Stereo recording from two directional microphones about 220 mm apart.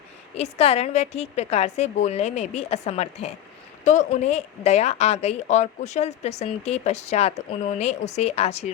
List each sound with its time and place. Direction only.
0.3 s speech: 30° left (ahead or behind)